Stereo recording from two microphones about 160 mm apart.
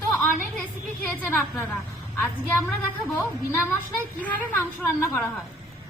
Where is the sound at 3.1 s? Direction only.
15° left (ahead or behind).